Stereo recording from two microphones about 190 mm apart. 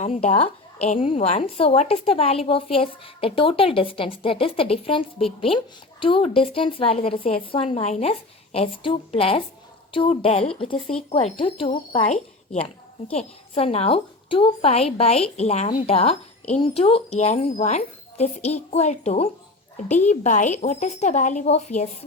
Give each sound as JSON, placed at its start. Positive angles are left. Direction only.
{"t": 0.0, "sound": "a woman's voice", "side_deg": 35}
{"t": 13.1, "sound": "a woman's voice", "side_deg": 30}